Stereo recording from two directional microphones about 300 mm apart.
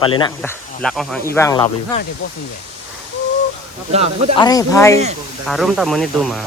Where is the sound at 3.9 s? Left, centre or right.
Right.